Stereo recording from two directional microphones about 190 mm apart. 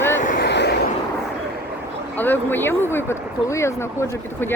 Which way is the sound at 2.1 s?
10° left (ahead or behind).